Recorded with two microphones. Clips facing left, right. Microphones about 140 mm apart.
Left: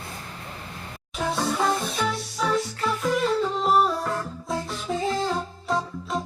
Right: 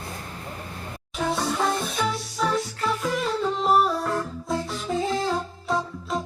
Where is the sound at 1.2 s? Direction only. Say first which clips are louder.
Even; centre (ahead or behind).